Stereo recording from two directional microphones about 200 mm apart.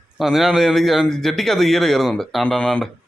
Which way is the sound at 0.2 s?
Centre (ahead or behind).